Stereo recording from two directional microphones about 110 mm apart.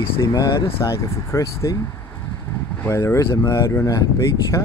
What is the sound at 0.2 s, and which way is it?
Speech, 30° left (ahead or behind).